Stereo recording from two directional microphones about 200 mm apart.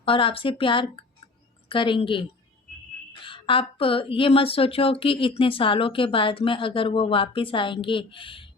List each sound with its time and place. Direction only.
0.0 s speech: 25° left (ahead or behind)